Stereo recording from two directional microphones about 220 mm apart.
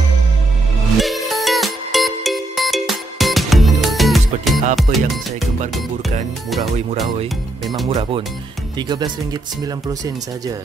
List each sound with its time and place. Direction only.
0.9 s music: centre (ahead or behind)
4.9 s speech: 35° right (ahead or behind)
7.6 s speech: centre (ahead or behind)
7.9 s speech: 25° right (ahead or behind)